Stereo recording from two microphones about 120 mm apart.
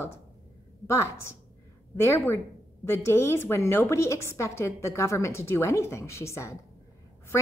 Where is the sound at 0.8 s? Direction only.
25° left (ahead or behind).